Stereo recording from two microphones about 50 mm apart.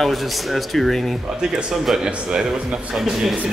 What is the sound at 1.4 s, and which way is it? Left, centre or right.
A man's voice, centre.